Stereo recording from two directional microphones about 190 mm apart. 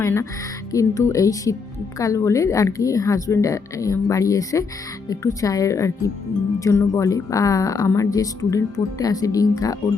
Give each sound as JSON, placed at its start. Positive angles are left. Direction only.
{"t": 0.0, "sound": "speech", "side_deg": 15}